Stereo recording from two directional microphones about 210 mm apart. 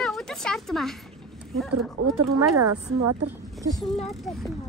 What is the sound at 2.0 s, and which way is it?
Speech, 90° right.